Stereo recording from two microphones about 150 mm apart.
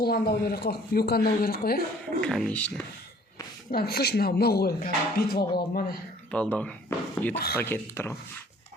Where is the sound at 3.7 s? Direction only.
90° left.